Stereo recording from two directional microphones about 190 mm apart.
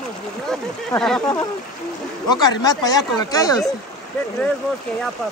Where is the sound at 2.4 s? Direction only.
20° left (ahead or behind).